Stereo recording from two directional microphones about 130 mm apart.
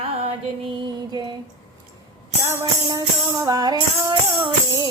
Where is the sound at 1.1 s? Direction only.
35° right (ahead or behind).